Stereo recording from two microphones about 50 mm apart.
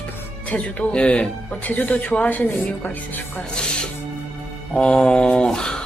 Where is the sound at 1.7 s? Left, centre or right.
Left.